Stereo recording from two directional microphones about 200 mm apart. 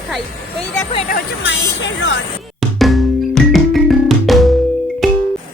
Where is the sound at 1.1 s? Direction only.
60° left (ahead or behind).